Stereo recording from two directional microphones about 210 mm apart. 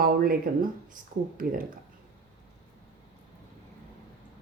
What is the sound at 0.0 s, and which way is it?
Speech, 45° right (ahead or behind).